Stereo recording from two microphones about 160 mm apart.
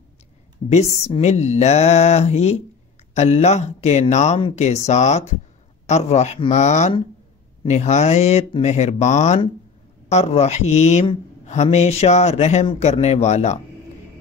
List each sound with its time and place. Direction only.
0.7 s speech: 40° left (ahead or behind)